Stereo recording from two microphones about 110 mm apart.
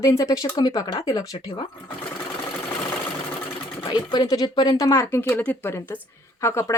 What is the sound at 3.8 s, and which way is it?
Speech, 45° left (ahead or behind).